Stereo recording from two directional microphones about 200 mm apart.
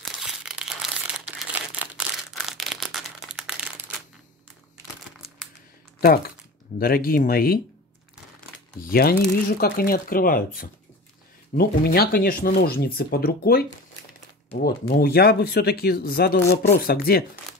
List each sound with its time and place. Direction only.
0.0 s crumpling: centre (ahead or behind)
2.3 s a sound: centre (ahead or behind)
5.9 s speech: 50° left (ahead or behind)
8.8 s speech: 50° left (ahead or behind)